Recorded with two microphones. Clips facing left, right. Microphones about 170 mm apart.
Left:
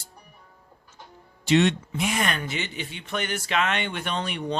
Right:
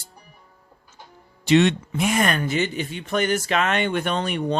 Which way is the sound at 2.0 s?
45° right (ahead or behind).